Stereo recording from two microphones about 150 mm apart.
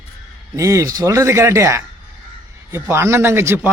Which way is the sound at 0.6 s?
20° right (ahead or behind).